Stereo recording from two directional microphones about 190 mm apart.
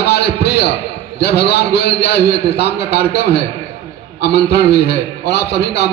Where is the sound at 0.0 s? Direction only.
60° left (ahead or behind).